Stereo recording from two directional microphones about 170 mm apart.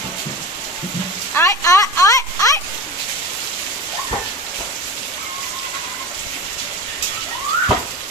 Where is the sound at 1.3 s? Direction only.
15° left (ahead or behind).